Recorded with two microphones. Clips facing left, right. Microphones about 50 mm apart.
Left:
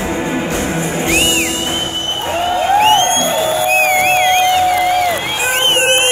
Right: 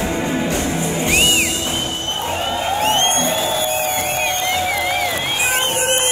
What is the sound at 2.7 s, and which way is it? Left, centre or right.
Music, left.